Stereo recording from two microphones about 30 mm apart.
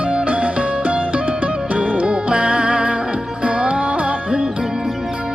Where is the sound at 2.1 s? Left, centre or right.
Right.